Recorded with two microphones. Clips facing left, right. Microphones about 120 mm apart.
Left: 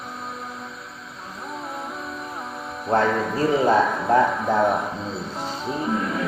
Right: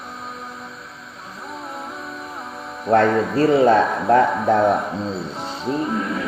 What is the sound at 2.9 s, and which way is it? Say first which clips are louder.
Speech: right 5 dB; 70° right (ahead or behind).